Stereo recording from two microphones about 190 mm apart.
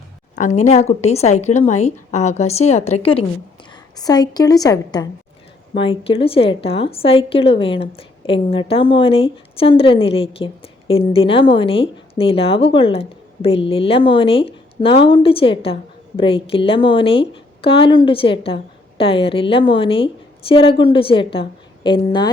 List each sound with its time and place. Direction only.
0.3 s a woman's voice: 40° left (ahead or behind)
3.7 s a woman's voice: 20° left (ahead or behind)
6.0 s a woman's voice: 30° left (ahead or behind)